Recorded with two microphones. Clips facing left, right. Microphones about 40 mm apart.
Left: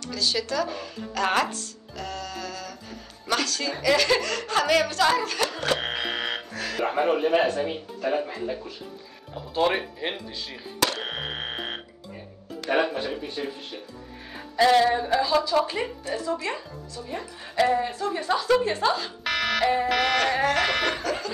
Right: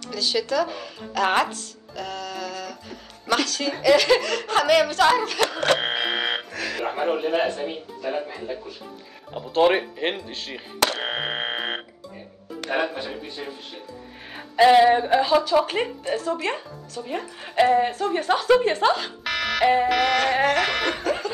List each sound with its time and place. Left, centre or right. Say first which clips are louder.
0.0 s speech: right 2 dB; right
6.9 s a man's voice: left 2 dB; centre
9.6 s speech: right 5 dB; centre
10.8 s alarm: right 3 dB; right
12.6 s music: left 2 dB; right
13.1 s a man's voice: left 2 dB; centre
14.3 s music: right 4 dB; right
15.0 s a woman's voice: right 4 dB; right
15.6 s speech: right 3 dB; right
19.2 s alarm: even; centre
19.9 s a man's voice: right 2 dB; centre
20.2 s speech: right 3 dB; right
20.5 s a man's voice: right 1 dB; centre
21.0 s speech: right 3 dB; right